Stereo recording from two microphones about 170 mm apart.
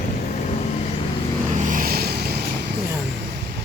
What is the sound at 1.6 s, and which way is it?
Vehicle, 50° right (ahead or behind).